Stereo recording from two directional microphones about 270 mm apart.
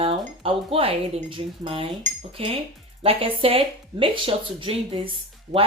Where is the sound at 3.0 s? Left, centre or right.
Right.